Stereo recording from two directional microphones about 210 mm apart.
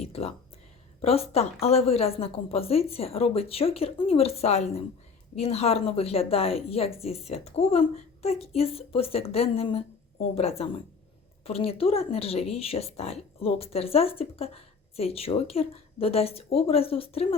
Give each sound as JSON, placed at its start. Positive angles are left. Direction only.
{"t": 0.0, "sound": "a woman's voice", "side_deg": 30}